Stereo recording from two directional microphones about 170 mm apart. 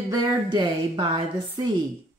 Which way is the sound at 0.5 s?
25° right (ahead or behind).